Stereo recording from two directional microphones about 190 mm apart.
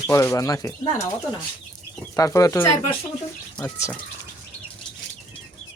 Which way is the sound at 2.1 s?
15° left (ahead or behind).